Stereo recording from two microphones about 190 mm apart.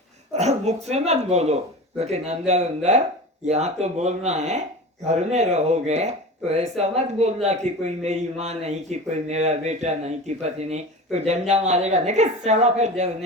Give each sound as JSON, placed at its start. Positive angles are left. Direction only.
{"t": 0.3, "sound": "speech", "side_deg": -35}